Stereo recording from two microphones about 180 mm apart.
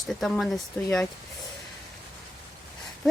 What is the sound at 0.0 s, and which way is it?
Speech, centre (ahead or behind).